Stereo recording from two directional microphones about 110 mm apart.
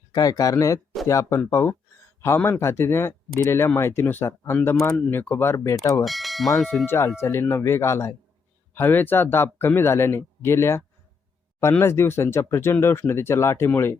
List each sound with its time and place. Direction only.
0.1 s speech: 35° left (ahead or behind)
6.1 s speech: centre (ahead or behind)
6.8 s speech: 25° left (ahead or behind)